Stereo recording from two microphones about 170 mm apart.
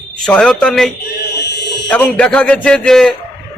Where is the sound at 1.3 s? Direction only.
85° left.